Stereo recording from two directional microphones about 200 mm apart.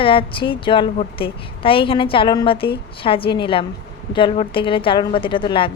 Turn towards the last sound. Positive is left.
turn(degrees=25)  # may be behind; listen again after turning